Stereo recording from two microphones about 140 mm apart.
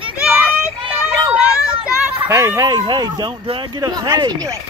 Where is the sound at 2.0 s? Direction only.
20° right (ahead or behind).